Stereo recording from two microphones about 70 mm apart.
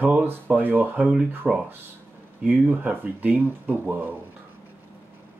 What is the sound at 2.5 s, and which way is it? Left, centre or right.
Speech, right.